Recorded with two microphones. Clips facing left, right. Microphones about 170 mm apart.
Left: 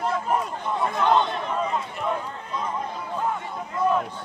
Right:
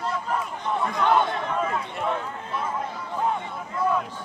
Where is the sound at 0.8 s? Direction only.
20° left (ahead or behind).